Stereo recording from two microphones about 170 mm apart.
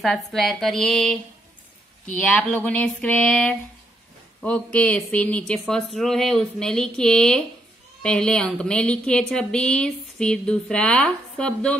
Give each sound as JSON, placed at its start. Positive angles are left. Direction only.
{"t": 0.0, "sound": "a woman's voice", "side_deg": 0}
{"t": 2.0, "sound": "a sound", "side_deg": 5}
{"t": 5.5, "sound": "a woman's voice", "side_deg": 5}